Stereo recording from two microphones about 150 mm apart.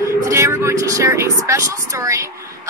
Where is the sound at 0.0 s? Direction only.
20° right (ahead or behind).